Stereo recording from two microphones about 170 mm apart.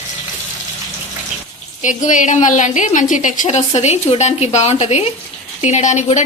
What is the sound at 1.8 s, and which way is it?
A woman's voice, 50° left (ahead or behind).